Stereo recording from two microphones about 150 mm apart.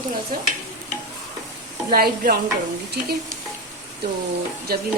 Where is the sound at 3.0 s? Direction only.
90° right.